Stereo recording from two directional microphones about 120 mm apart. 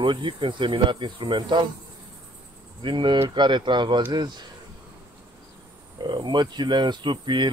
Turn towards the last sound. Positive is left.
turn(degrees=-40)  # may be behind; listen again after turning